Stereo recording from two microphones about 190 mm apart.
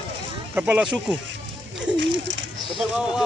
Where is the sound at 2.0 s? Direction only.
70° right (ahead or behind).